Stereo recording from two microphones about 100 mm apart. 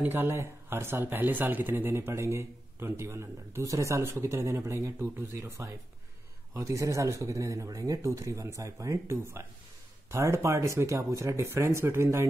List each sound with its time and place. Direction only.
0.0 s speech: 20° right (ahead or behind)